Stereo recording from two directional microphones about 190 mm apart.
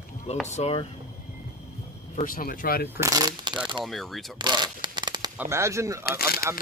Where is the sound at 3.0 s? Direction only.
20° right (ahead or behind).